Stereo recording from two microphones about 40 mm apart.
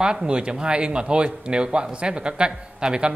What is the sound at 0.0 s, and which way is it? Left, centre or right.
Speech, right.